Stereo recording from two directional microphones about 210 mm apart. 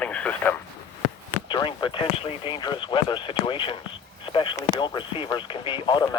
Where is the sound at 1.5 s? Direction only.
25° left (ahead or behind).